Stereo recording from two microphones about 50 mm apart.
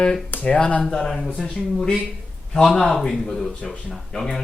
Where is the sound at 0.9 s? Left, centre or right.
Centre.